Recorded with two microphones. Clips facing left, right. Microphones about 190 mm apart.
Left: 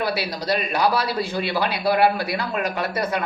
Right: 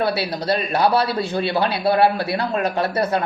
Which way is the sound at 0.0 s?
30° right (ahead or behind).